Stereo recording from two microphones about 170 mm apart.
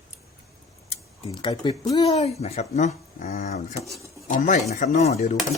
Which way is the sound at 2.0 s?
40° left (ahead or behind).